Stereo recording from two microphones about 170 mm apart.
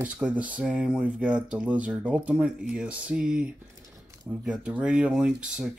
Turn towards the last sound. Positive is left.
turn(degrees=-5)  # may be behind; listen again after turning